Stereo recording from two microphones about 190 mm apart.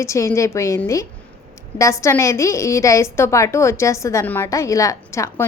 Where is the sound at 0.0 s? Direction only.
15° left (ahead or behind).